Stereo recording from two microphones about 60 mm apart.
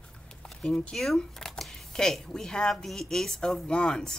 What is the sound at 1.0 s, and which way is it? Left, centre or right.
Speech, centre.